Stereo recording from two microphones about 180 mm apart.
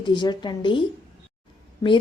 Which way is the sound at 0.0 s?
25° left (ahead or behind).